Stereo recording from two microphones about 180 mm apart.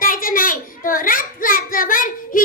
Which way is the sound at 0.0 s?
50° left (ahead or behind).